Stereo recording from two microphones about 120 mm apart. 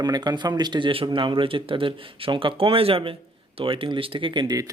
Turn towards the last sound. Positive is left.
turn(degrees=-30)  # may be behind; listen again after turning